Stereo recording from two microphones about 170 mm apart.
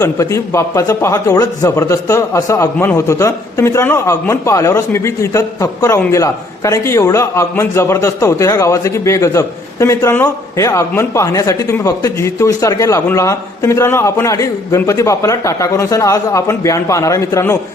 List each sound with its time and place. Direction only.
0.0 s a man's voice: 15° left (ahead or behind)